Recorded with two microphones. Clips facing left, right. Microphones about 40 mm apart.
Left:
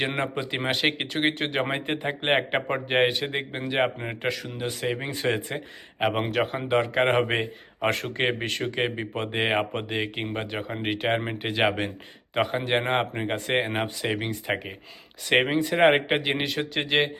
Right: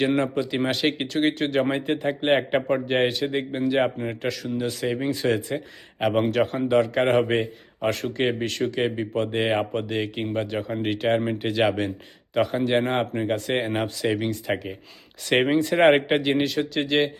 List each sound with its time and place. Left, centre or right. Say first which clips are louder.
0.0 s speech: right 5 dB; left
6.0 s speech: right 3 dB; centre
15.2 s speech: right 2 dB; centre